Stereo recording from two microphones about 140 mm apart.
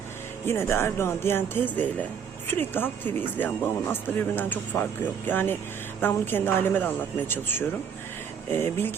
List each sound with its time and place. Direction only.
0.4 s speech: 15° left (ahead or behind)